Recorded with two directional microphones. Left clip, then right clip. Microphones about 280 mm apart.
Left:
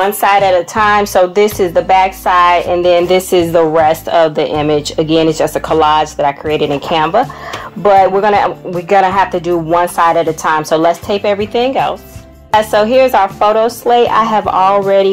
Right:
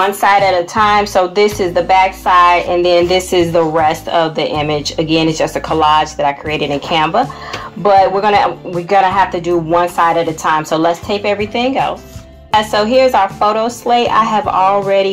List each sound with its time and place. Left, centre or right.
0.0 s a woman's voice: left